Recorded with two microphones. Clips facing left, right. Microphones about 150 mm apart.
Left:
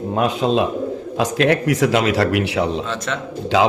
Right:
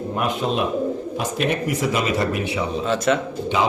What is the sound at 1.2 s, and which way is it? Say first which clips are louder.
Speech: left 7 dB; 90° left.